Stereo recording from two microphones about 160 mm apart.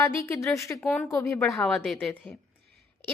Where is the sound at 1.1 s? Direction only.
20° left (ahead or behind).